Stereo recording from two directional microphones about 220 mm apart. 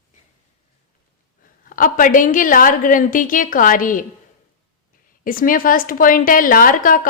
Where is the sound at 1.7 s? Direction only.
40° left (ahead or behind).